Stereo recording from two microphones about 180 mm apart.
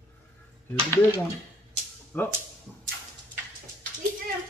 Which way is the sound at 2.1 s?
10° left (ahead or behind).